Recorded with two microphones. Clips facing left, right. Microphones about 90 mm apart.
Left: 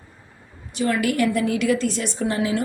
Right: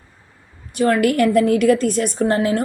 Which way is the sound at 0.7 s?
50° right (ahead or behind).